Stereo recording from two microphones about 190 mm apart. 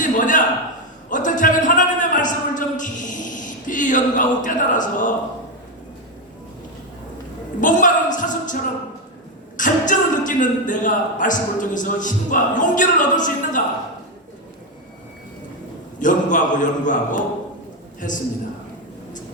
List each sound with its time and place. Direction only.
0.0 s a sound: 45° left (ahead or behind)
1.1 s a man's voice: 45° left (ahead or behind)
7.6 s a woman's voice: 45° left (ahead or behind)
9.6 s speech: 40° left (ahead or behind)
16.0 s speech: 45° left (ahead or behind)